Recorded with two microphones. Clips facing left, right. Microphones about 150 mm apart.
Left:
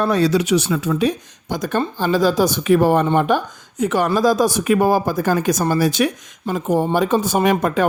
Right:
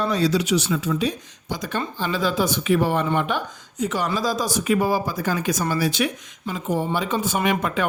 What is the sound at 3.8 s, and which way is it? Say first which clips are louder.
Speech: left 7 dB; 55° left (ahead or behind).